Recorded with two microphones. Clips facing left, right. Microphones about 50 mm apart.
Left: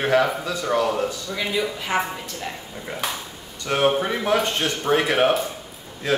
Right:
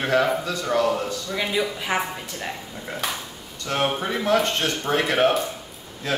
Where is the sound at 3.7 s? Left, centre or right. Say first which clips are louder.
Left 4 dB; centre.